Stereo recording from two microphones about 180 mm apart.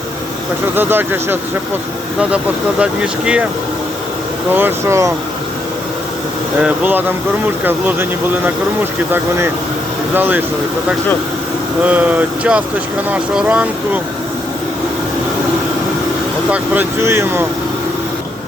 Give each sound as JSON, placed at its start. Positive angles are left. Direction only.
{"t": 0.8, "sound": "speech", "side_deg": -10}
{"t": 4.5, "sound": "speech", "side_deg": -15}
{"t": 6.6, "sound": "speech", "side_deg": -10}
{"t": 11.8, "sound": "speech", "side_deg": -10}
{"t": 16.5, "sound": "speech", "side_deg": -10}